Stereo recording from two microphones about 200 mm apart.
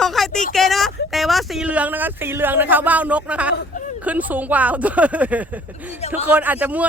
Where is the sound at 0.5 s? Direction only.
Centre (ahead or behind).